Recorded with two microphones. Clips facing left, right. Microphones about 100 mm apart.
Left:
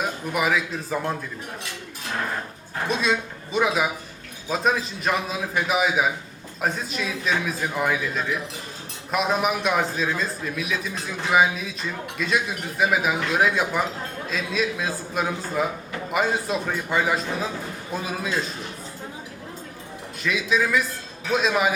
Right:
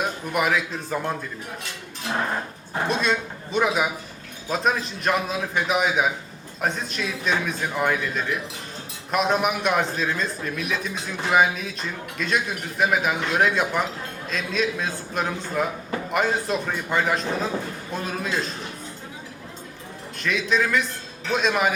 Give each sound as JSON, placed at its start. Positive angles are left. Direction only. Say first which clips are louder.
{"t": 0.0, "sound": "speech", "louder": "right 1 dB", "side_deg": 0}
{"t": 2.8, "sound": "a man's voice", "louder": "even", "side_deg": 0}
{"t": 20.2, "sound": "a man's voice", "louder": "even", "side_deg": 5}